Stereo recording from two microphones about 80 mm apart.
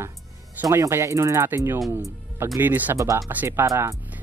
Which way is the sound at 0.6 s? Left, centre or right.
Right.